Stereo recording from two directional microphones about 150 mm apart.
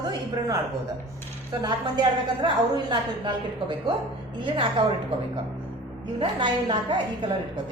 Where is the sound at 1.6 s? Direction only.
30° right (ahead or behind).